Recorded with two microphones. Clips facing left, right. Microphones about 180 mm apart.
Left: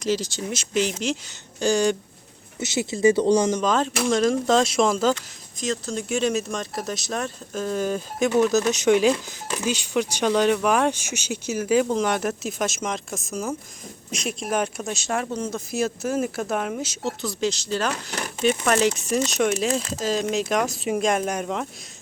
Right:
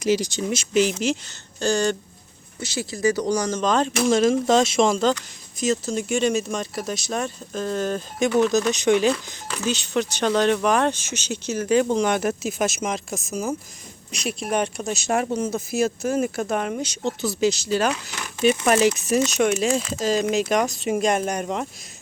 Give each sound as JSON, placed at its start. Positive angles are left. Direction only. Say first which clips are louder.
{"t": 0.0, "sound": "speech", "louder": "right 3 dB", "side_deg": -15}
{"t": 1.5, "sound": "speech", "louder": "left 1 dB", "side_deg": 10}
{"t": 2.6, "sound": "speech", "louder": "left 3 dB", "side_deg": 20}
{"t": 3.6, "sound": "speech", "louder": "right 2 dB", "side_deg": 5}
{"t": 17.9, "sound": "speech", "louder": "left 3 dB", "side_deg": 50}
{"t": 19.3, "sound": "speech", "louder": "right 2 dB", "side_deg": 0}